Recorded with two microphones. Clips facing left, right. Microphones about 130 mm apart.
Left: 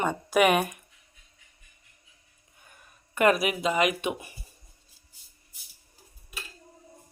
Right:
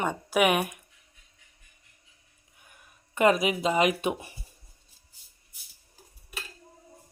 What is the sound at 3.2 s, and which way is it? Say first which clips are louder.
Speech: even; 20° right (ahead or behind).